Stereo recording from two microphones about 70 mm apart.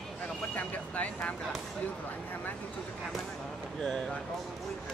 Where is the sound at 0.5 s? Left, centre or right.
Centre.